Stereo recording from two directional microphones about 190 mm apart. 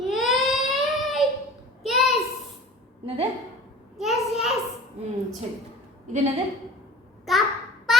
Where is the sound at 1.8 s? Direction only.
Centre (ahead or behind).